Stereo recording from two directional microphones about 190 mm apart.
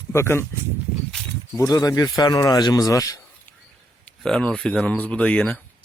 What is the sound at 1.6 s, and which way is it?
Speech, 20° left (ahead or behind).